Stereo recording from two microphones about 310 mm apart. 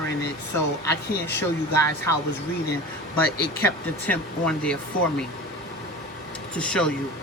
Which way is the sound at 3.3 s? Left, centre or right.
Left.